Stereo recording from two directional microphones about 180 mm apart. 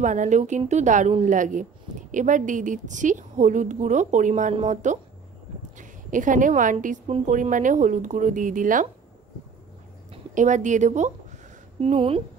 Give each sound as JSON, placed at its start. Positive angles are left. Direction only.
{"t": 0.0, "sound": "a woman's voice", "side_deg": -45}
{"t": 10.3, "sound": "a woman's voice", "side_deg": -45}